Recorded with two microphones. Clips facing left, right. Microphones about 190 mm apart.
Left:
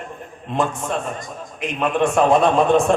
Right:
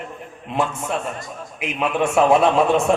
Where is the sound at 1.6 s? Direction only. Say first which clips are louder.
Left 2 dB; 5° right (ahead or behind).